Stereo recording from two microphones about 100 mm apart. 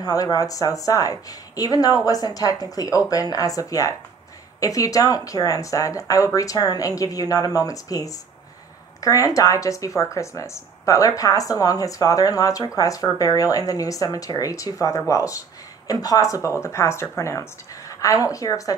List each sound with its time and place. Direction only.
0.0 s speech: 40° left (ahead or behind)